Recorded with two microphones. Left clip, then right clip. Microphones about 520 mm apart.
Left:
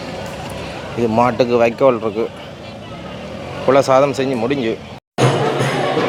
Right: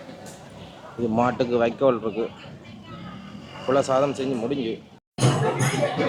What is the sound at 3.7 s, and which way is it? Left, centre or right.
Speech, left.